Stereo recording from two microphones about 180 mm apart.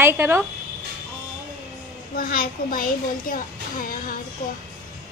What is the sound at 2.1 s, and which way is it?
A woman's voice, 55° left (ahead or behind).